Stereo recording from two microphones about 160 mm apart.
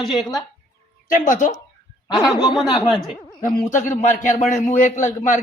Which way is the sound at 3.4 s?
50° left (ahead or behind).